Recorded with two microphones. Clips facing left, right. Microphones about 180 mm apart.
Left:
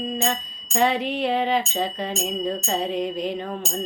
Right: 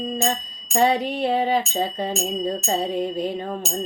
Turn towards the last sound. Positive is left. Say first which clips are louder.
# right 1 dB
turn(degrees=-45)  # may be behind; listen again after turning